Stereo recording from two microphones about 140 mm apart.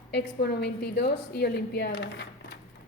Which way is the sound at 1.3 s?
90° left.